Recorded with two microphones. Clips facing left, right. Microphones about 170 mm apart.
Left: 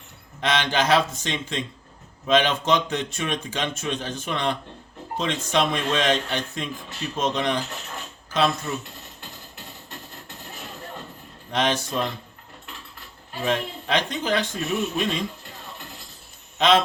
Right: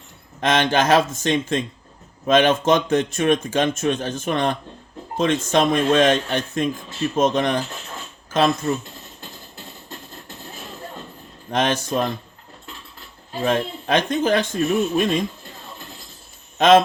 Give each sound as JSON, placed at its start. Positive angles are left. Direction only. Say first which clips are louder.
{"t": 0.4, "sound": "speech", "louder": "right 4 dB", "side_deg": -45}
{"t": 11.5, "sound": "speech", "louder": "right 3 dB", "side_deg": -45}
{"t": 13.4, "sound": "speech", "louder": "right 4 dB", "side_deg": -50}
{"t": 16.6, "sound": "a man's voice", "louder": "right 6 dB", "side_deg": -45}